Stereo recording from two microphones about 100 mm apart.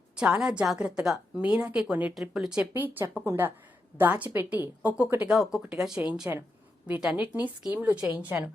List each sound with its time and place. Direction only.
0.2 s a woman's voice: 10° right (ahead or behind)
2.7 s a woman's voice: 20° right (ahead or behind)
6.3 s a woman's voice: 25° right (ahead or behind)
6.8 s a woman's voice: 10° right (ahead or behind)